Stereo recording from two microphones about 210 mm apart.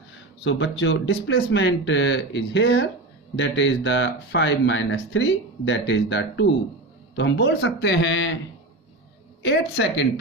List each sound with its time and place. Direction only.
0.4 s speech: 60° left (ahead or behind)
9.4 s speech: 55° left (ahead or behind)